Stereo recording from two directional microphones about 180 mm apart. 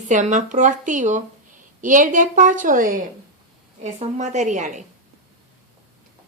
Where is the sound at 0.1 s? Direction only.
45° right (ahead or behind).